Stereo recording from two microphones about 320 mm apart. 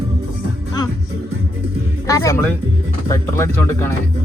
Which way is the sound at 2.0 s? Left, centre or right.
Centre.